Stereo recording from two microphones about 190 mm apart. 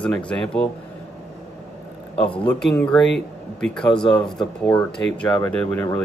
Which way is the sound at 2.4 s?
5° left (ahead or behind).